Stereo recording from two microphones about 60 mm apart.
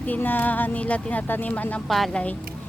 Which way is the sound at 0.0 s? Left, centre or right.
Left.